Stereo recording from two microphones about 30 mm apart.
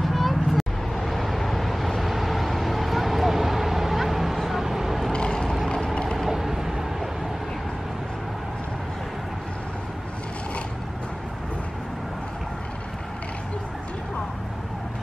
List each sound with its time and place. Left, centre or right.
0.0 s vehicle: centre
5.1 s vehicle: left
6.1 s vehicle: centre